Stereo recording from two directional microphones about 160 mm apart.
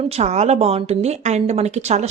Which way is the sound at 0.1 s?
40° right (ahead or behind).